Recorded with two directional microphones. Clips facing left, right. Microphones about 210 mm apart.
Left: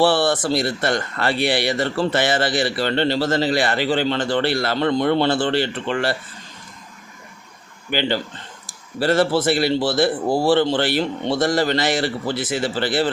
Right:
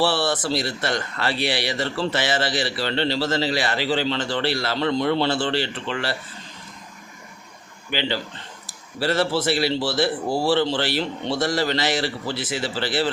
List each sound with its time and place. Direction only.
0.0 s a man's voice: 55° left (ahead or behind)
7.9 s a man's voice: 50° left (ahead or behind)